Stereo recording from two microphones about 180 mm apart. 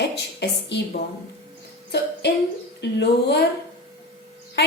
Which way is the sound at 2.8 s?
70° left (ahead or behind).